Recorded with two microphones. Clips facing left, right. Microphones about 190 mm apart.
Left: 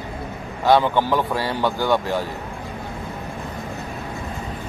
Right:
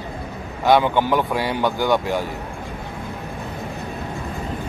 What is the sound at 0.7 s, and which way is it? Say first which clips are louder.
Speech: right 1 dB; 15° right (ahead or behind).